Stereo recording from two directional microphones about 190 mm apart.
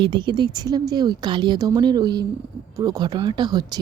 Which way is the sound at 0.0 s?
25° right (ahead or behind).